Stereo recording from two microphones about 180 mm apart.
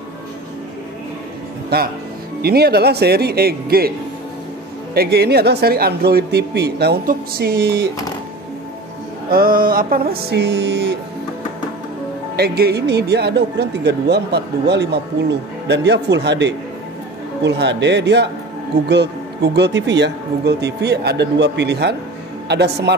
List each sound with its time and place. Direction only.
1.7 s speech: 60° right (ahead or behind)
4.9 s speech: 60° right (ahead or behind)
9.3 s speech: 55° right (ahead or behind); by 11.0 s 70° right (ahead or behind)
12.4 s speech: 60° right (ahead or behind)